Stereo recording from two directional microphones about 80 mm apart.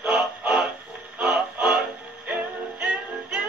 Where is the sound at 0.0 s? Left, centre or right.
Centre.